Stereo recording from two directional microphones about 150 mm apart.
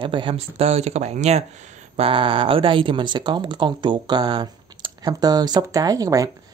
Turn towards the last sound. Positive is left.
turn(degrees=-25)  # may be behind; listen again after turning